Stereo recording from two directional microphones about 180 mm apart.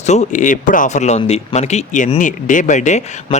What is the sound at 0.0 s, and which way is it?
A man's voice, 40° left (ahead or behind).